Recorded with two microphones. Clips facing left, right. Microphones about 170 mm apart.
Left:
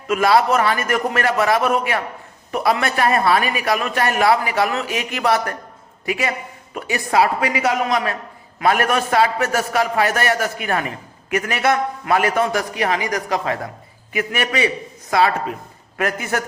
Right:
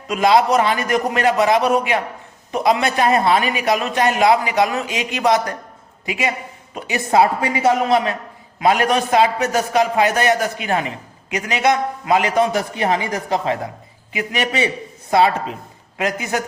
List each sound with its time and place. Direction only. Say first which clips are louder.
0.1 s a man's voice: right 1 dB; 20° right (ahead or behind)